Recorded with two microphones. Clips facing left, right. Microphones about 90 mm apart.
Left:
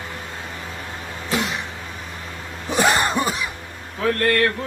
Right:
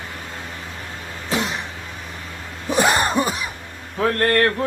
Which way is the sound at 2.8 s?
25° right (ahead or behind).